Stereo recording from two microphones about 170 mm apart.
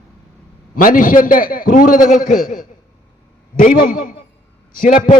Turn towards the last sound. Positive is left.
turn(degrees=50)  # may be behind; listen again after turning